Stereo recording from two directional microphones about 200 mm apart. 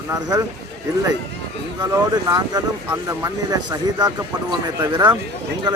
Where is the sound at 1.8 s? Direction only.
15° right (ahead or behind).